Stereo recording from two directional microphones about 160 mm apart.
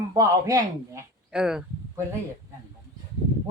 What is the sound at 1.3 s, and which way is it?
Speech, 5° right (ahead or behind).